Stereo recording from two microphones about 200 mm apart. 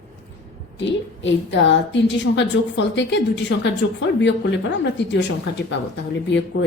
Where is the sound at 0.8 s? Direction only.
65° left (ahead or behind).